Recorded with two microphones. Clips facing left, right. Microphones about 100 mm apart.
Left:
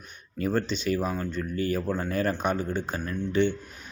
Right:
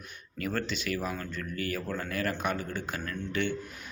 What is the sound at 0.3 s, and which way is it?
Speech, 25° left (ahead or behind).